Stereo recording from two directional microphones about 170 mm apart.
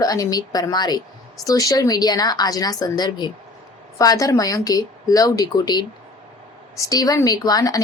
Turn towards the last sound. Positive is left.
turn(degrees=20)  # may be behind; listen again after turning